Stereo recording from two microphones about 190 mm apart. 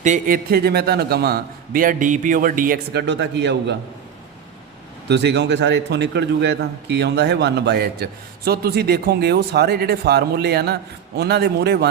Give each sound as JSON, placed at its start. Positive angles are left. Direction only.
{"t": 0.0, "sound": "a man's voice", "side_deg": -45}
{"t": 5.0, "sound": "a man's voice", "side_deg": -65}